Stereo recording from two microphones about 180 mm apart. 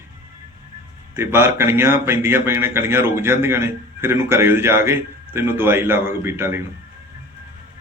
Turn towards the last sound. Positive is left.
turn(degrees=-15)  # may be behind; listen again after turning